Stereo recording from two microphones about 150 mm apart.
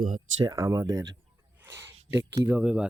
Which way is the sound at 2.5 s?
10° right (ahead or behind).